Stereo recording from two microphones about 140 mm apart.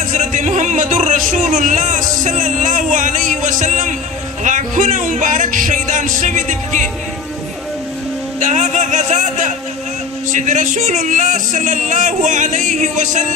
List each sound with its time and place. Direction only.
0.1 s a sound: 60° right (ahead or behind)
1.3 s speech: 60° right (ahead or behind)
8.4 s speech: 60° right (ahead or behind)